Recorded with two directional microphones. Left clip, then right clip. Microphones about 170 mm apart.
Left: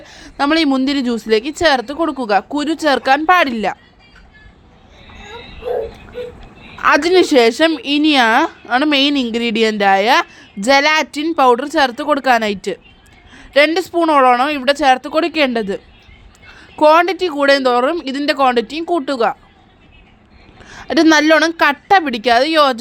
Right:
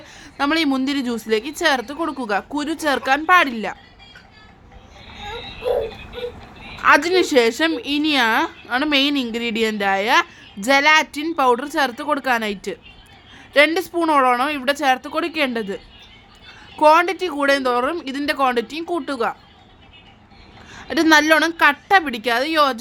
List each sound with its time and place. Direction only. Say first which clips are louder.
0.0 s a woman's voice: left 4 dB; 30° left (ahead or behind)
6.8 s speech: left 3 dB; 30° left (ahead or behind)
13.3 s a sound: left 3 dB; 30° left (ahead or behind)
13.7 s a woman's voice: left 5 dB; 30° left (ahead or behind)
20.7 s speech: left 4 dB; 30° left (ahead or behind)